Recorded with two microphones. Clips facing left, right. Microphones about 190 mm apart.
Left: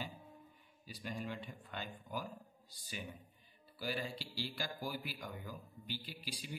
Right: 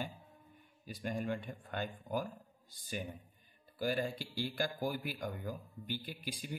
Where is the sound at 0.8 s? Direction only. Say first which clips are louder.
Right 6 dB; 50° right (ahead or behind).